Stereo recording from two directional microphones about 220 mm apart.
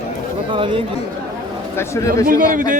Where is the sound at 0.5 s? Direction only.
25° right (ahead or behind).